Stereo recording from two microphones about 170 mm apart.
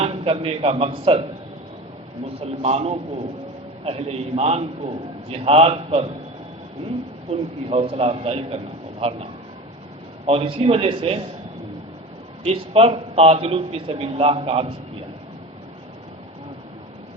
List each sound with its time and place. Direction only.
0.0 s a man's voice: 30° right (ahead or behind)
2.4 s a man's voice: 35° right (ahead or behind)
7.3 s a man's voice: 35° right (ahead or behind)
12.4 s a man's voice: 35° right (ahead or behind)